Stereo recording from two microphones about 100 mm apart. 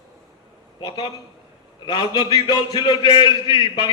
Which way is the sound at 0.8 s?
45° left (ahead or behind).